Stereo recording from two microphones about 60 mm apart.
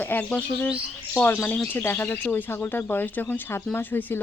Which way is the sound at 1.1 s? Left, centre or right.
Left.